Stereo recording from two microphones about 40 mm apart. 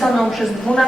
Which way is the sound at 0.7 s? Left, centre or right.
Left.